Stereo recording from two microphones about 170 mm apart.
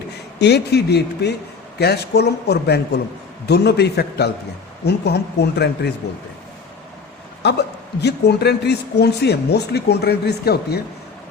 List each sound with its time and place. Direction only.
0.3 s speech: 80° left
7.4 s speech: 80° left